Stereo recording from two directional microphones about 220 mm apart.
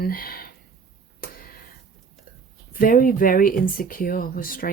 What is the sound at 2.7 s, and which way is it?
Speech, 40° left (ahead or behind).